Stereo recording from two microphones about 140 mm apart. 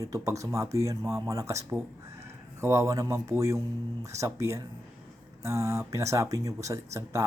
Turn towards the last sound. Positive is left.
turn(degrees=-20)  # may be behind; listen again after turning